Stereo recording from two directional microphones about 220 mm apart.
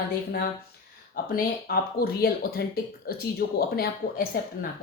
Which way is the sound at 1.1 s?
45° left (ahead or behind).